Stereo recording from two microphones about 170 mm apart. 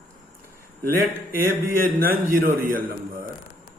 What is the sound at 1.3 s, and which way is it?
A man's voice, 55° right (ahead or behind).